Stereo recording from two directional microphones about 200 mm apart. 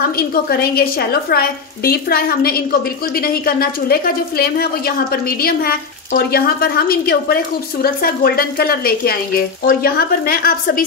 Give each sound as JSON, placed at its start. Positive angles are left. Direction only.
{"t": 0.3, "sound": "a woman's voice", "side_deg": 50}